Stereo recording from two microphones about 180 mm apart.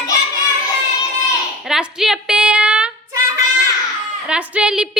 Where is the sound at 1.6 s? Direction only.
5° right (ahead or behind).